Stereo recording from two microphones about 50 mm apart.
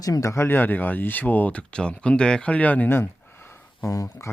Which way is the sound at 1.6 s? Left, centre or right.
Left.